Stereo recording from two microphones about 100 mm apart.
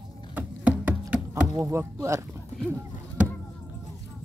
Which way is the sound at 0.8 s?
10° right (ahead or behind).